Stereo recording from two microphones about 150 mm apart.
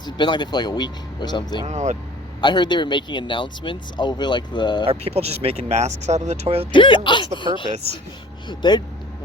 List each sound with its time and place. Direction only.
0.0 s speech: 30° left (ahead or behind)
1.6 s speech: 50° right (ahead or behind)
2.4 s speech: 30° left (ahead or behind)
4.9 s speech: 45° right (ahead or behind)
6.7 s speech: 35° left (ahead or behind)
8.4 s speech: 30° left (ahead or behind)